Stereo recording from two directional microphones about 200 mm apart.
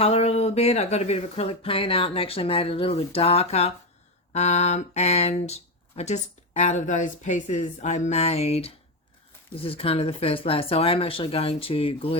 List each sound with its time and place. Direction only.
0.0 s speech: 30° left (ahead or behind)